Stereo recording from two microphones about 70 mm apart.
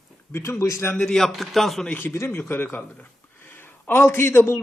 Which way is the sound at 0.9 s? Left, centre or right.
Centre.